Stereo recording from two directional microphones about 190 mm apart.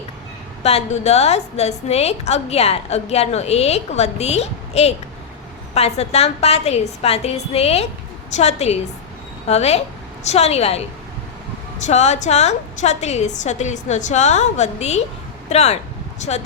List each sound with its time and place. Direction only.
0.6 s a woman's voice: 35° left (ahead or behind)
11.9 s a woman's voice: 35° left (ahead or behind)